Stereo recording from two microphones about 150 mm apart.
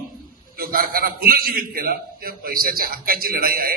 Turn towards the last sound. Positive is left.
turn(degrees=-75)  # may be behind; listen again after turning